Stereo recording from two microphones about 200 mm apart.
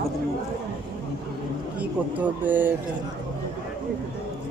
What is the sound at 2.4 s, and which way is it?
Speech, 10° right (ahead or behind).